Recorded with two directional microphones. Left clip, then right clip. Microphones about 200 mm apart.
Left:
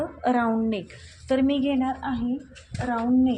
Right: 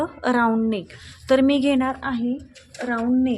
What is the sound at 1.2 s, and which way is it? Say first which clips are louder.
Speech: right 5 dB; 30° right (ahead or behind).